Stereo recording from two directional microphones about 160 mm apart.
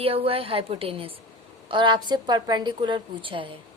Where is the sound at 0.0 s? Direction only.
35° right (ahead or behind).